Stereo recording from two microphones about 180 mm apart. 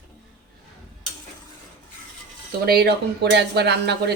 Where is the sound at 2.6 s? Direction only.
60° right (ahead or behind).